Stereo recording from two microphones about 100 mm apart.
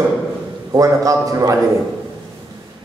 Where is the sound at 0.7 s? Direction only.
35° right (ahead or behind).